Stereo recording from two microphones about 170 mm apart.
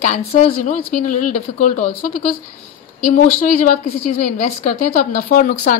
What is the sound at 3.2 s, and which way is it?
A woman's voice, 45° left (ahead or behind).